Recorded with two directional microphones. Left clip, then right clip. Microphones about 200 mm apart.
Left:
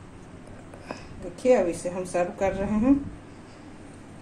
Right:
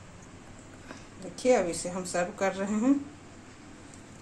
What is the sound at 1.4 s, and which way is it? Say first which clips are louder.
Speech: left 4 dB; 20° right (ahead or behind).